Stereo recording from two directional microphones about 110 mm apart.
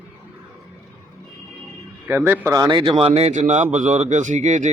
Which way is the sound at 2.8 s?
50° right (ahead or behind).